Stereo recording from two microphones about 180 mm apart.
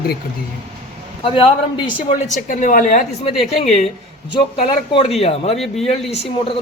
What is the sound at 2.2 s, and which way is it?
A woman's voice, 45° left (ahead or behind).